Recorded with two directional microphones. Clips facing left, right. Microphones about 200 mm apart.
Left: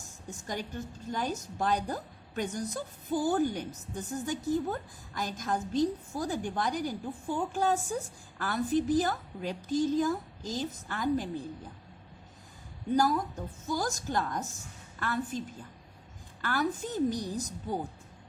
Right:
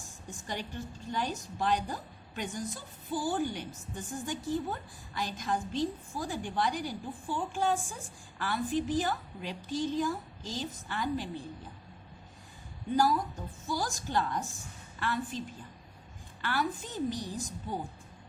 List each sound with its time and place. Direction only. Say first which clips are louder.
0.3 s a woman's voice: left 2 dB; 45° left (ahead or behind)
13.7 s a woman's voice: left 2 dB; 45° left (ahead or behind)
16.4 s a woman's voice: left 2 dB; 45° left (ahead or behind)